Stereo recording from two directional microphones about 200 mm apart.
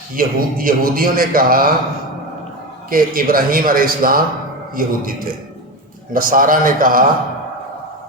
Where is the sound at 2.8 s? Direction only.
45° right (ahead or behind).